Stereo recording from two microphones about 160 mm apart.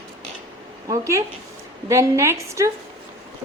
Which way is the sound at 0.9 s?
20° right (ahead or behind).